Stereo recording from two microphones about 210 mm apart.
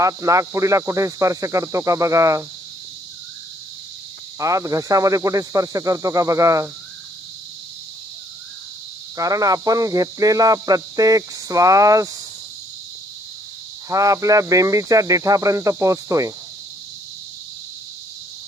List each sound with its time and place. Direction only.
0.0 s speech: 15° right (ahead or behind)
4.4 s speech: 15° right (ahead or behind)
9.1 s speech: 15° right (ahead or behind)
13.9 s speech: 15° right (ahead or behind)